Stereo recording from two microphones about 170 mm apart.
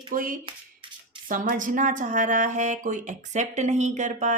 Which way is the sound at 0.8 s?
30° right (ahead or behind).